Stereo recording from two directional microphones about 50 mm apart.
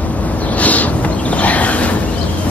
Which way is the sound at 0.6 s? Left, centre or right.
Left.